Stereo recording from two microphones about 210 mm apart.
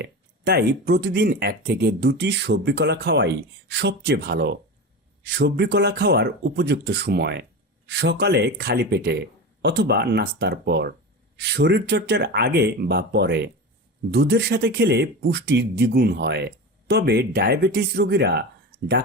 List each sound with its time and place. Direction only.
0.0 s speech: 50° right (ahead or behind)